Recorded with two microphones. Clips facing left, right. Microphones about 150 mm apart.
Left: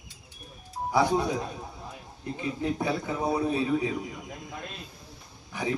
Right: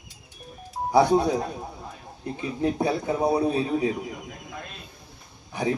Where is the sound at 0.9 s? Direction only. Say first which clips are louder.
Right 5 dB; 35° right (ahead or behind).